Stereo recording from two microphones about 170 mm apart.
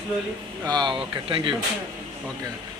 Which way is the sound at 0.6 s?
25° right (ahead or behind).